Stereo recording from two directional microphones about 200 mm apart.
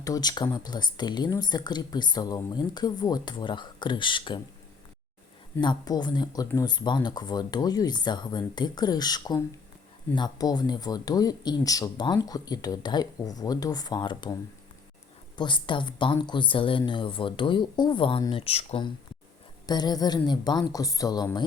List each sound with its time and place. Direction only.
0.0 s speech: 20° left (ahead or behind)
5.5 s speech: 20° left (ahead or behind)
15.4 s speech: 25° left (ahead or behind)